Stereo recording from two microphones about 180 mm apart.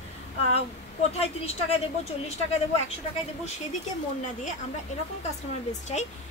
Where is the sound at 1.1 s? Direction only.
35° left (ahead or behind).